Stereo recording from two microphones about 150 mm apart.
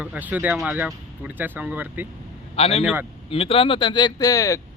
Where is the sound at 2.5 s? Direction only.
40° left (ahead or behind).